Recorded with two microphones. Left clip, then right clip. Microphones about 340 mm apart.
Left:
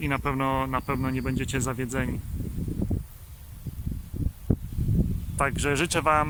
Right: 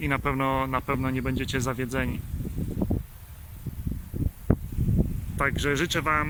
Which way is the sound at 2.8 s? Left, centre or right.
Right.